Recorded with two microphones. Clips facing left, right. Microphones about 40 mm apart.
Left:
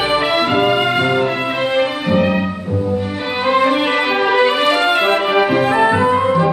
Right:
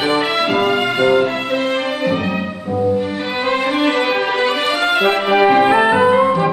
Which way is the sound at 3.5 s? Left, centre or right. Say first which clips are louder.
Left 3 dB; centre.